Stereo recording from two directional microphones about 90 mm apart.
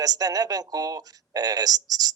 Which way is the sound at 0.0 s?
45° right (ahead or behind).